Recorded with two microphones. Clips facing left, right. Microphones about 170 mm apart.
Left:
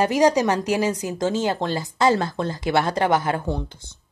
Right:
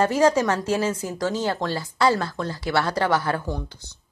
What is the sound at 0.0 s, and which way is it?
Speech, 15° left (ahead or behind).